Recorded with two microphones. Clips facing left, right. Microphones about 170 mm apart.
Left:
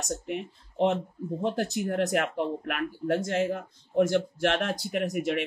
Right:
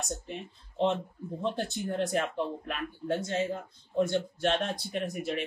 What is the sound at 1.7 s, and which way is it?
Speech, 90° left.